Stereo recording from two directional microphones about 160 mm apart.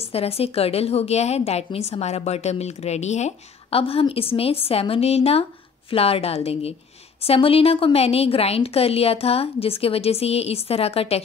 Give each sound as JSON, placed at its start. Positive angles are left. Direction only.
{"t": 0.1, "sound": "a woman's voice", "side_deg": 40}